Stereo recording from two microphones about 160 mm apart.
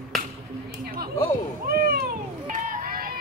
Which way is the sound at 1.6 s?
70° right (ahead or behind).